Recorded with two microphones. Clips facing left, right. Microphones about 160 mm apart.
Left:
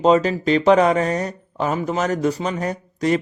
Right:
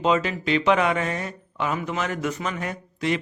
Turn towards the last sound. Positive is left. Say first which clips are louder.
# left 5 dB
turn(degrees=40)  # may be behind; listen again after turning